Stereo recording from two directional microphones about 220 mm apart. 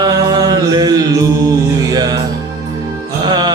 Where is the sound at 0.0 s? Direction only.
20° right (ahead or behind).